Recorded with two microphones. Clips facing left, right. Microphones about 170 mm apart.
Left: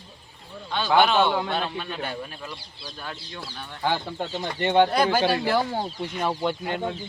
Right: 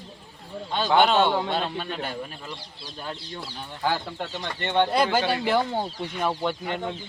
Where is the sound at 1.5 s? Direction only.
30° right (ahead or behind).